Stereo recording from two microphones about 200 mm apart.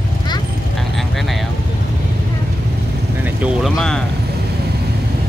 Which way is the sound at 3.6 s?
Centre (ahead or behind).